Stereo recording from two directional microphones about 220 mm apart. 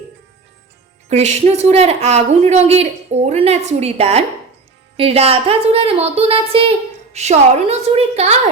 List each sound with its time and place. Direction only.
1.0 s a woman's voice: 30° right (ahead or behind)